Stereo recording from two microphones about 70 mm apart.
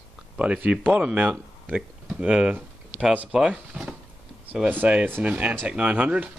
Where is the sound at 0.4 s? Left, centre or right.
Centre.